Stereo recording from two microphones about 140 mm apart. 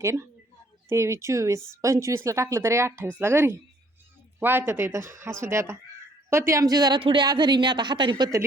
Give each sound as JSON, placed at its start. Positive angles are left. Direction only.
{"t": 0.0, "sound": "a woman's voice", "side_deg": -20}